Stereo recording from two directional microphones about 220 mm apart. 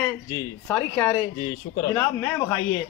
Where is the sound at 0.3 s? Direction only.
10° left (ahead or behind).